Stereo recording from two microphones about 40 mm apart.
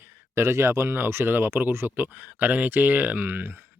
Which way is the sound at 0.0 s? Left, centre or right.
Right.